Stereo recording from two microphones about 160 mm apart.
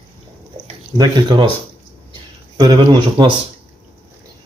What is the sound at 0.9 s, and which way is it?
Speech, 30° right (ahead or behind).